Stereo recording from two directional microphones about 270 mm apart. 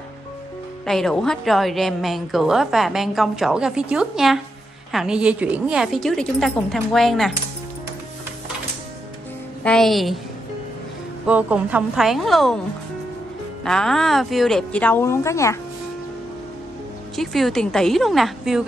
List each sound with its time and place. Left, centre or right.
0.8 s a woman's voice: centre
9.6 s a woman's voice: centre
11.2 s a woman's voice: centre
13.7 s a woman's voice: centre
17.1 s a woman's voice: centre